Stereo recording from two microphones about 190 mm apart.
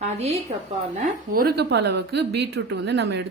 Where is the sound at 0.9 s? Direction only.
50° right (ahead or behind).